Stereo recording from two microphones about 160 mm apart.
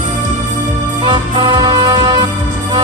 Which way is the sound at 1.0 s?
30° right (ahead or behind).